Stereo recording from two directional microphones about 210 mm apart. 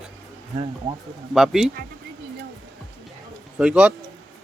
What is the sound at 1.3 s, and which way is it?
Speech, centre (ahead or behind).